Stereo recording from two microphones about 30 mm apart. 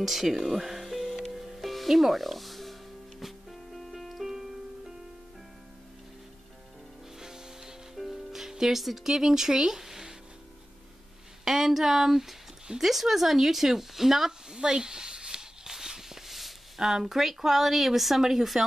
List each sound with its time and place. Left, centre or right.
0.0 s speech: centre
1.3 s music: centre
4.3 s music: centre
7.2 s music: centre
11.4 s speech: centre
14.7 s a sound: right; by 18.2 s centre
18.2 s speech: centre